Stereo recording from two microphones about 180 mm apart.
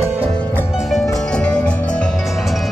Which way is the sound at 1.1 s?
5° left (ahead or behind).